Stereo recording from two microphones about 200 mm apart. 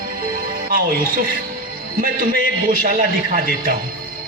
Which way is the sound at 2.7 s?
45° right (ahead or behind).